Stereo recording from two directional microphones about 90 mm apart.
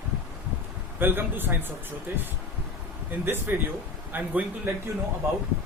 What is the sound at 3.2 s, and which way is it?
A man's voice, 25° right (ahead or behind).